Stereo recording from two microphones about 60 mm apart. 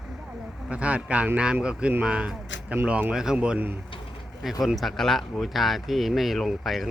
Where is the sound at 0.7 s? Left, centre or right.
Right.